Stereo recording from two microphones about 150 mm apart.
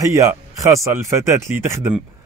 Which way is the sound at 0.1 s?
20° right (ahead or behind).